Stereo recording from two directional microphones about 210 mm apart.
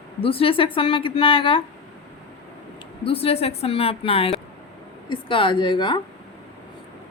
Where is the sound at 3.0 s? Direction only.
25° left (ahead or behind).